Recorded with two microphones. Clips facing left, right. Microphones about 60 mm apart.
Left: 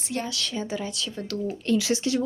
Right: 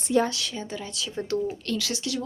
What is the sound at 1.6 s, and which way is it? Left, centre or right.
Speech, centre.